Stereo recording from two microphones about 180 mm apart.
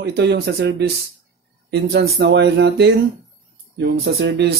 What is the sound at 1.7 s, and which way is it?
Speech, 60° right (ahead or behind).